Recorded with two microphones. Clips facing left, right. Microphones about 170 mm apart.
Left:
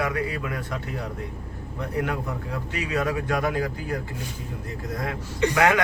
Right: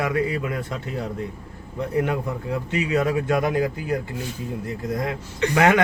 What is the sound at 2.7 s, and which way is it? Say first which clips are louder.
A man's voice: right 4 dB; 25° right (ahead or behind).